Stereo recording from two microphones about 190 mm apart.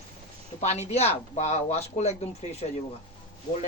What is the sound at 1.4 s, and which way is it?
Speech, 35° left (ahead or behind).